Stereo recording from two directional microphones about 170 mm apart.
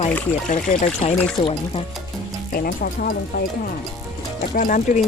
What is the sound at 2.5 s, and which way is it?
Speech, 60° left (ahead or behind).